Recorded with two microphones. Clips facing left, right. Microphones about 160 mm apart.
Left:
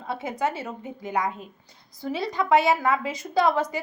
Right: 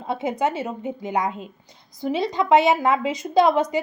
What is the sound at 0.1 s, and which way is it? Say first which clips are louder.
Speech: right 4 dB; 20° right (ahead or behind).